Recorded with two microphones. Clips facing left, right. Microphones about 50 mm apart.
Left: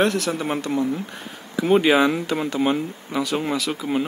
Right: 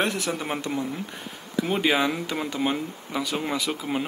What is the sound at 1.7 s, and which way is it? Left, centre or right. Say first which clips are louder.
Speech: left 7 dB; centre.